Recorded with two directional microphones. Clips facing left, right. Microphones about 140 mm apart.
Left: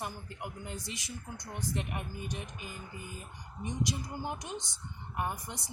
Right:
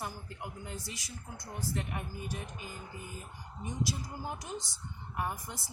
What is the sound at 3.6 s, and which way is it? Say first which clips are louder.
Speech: left 2 dB; 15° right (ahead or behind).